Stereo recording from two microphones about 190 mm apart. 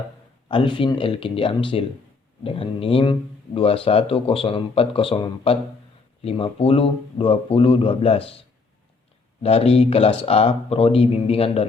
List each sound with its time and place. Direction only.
0.4 s speech: 25° left (ahead or behind)
9.4 s speech: 30° left (ahead or behind)